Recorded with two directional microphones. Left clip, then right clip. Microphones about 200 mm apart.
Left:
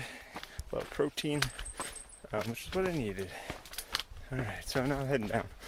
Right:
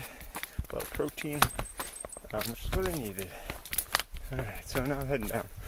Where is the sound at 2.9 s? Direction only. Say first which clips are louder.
Left 2 dB; 15° left (ahead or behind).